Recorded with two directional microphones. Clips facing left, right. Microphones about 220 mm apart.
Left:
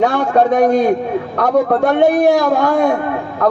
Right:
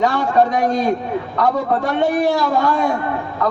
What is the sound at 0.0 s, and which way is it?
A man's voice, 65° left (ahead or behind).